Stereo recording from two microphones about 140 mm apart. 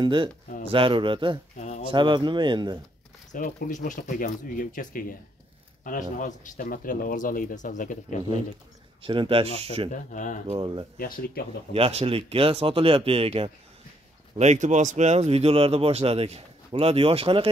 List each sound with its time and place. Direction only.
0.0 s speech: 35° right (ahead or behind)
1.6 s a sound: 60° left (ahead or behind)
1.9 s speech: 35° right (ahead or behind)
3.3 s speech: 70° left (ahead or behind)
5.9 s speech: 65° left (ahead or behind)
9.0 s speech: 35° right (ahead or behind)
9.9 s speech: 65° left (ahead or behind)
10.6 s speech: 35° right (ahead or behind)
11.0 s speech: 90° left
11.7 s speech: 45° right (ahead or behind)
14.3 s speech: 55° right (ahead or behind)